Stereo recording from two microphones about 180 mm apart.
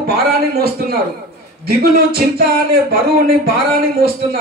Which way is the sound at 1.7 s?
55° right (ahead or behind).